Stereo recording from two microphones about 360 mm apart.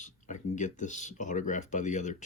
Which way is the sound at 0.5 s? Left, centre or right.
Left.